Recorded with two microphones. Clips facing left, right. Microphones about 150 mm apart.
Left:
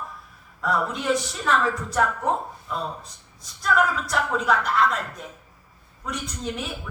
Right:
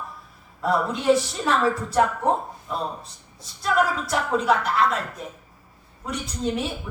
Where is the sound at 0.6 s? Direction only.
30° right (ahead or behind).